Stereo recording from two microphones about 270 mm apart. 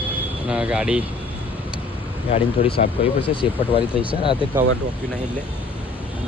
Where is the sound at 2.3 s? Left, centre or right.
Left.